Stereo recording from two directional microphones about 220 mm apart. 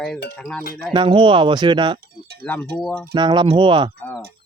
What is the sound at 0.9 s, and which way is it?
Speech, 20° right (ahead or behind).